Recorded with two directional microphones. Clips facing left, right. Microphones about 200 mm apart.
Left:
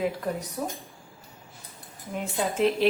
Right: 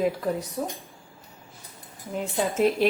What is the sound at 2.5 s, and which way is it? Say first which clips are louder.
Speech: right 1 dB; 45° right (ahead or behind).